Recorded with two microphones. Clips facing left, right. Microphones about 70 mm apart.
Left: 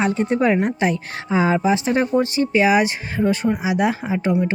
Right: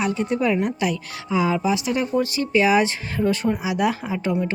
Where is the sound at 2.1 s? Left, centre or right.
Left.